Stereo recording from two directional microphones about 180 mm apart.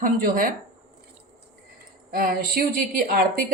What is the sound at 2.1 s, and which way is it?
A woman's voice, 55° right (ahead or behind).